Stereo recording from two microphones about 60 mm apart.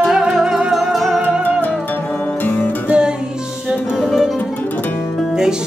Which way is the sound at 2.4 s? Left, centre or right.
Left.